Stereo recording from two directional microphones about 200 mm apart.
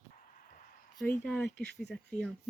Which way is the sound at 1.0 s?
5° left (ahead or behind).